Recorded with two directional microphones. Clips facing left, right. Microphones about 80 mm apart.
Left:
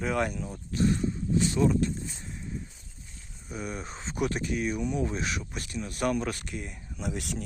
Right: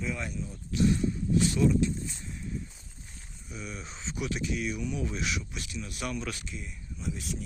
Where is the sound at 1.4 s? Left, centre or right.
Left.